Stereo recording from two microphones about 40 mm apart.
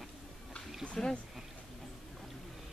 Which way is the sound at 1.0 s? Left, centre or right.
Centre.